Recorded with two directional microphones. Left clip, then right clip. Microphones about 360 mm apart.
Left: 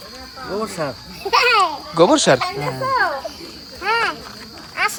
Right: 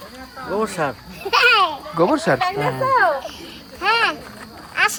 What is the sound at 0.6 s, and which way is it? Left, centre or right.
A child's voice, centre.